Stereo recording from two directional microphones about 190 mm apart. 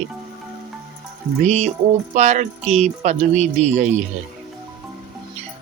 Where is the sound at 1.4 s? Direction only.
35° right (ahead or behind).